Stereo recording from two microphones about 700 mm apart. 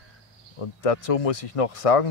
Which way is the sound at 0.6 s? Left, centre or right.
Left.